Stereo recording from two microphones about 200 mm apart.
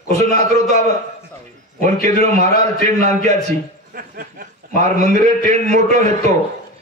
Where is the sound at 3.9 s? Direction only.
45° right (ahead or behind).